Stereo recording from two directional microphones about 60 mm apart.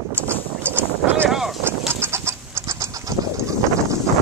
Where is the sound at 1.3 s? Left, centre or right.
Centre.